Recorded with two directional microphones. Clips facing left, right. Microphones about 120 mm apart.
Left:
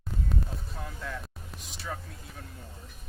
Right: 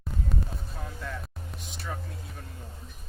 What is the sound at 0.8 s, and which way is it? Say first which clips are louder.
Speech: even; centre (ahead or behind).